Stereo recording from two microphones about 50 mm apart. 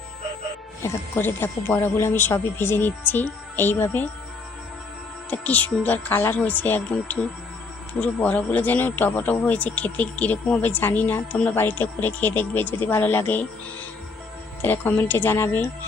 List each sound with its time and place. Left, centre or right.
1.1 s speech: left
5.3 s speech: left
7.9 s speech: left
10.7 s speech: left
14.6 s speech: left